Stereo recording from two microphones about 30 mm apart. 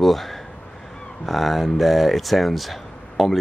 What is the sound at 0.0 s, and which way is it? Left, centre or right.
Speech, centre.